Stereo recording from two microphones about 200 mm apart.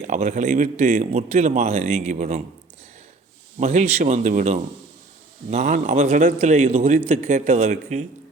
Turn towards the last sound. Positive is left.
turn(degrees=-35)  # may be behind; listen again after turning